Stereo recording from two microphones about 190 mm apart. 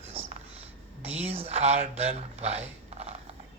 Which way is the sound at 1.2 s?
30° right (ahead or behind).